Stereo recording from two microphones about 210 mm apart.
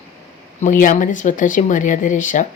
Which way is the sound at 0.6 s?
40° left (ahead or behind).